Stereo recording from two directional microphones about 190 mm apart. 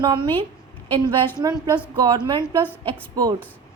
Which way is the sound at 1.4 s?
20° right (ahead or behind).